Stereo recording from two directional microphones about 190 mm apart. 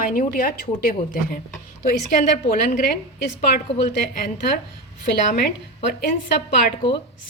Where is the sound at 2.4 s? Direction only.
50° left (ahead or behind).